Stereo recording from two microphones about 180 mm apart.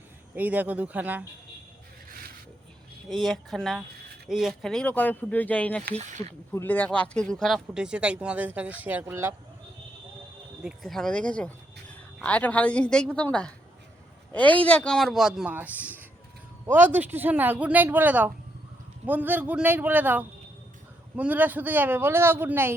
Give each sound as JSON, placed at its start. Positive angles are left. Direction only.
{"t": 0.3, "sound": "speech", "side_deg": -10}
{"t": 3.1, "sound": "speech", "side_deg": 0}
{"t": 5.9, "sound": "speech", "side_deg": -40}
{"t": 6.5, "sound": "speech", "side_deg": 10}
{"t": 10.6, "sound": "speech", "side_deg": 0}